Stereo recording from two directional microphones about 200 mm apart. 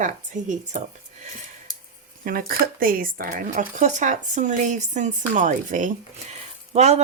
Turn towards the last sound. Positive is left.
turn(degrees=-35)  # may be behind; listen again after turning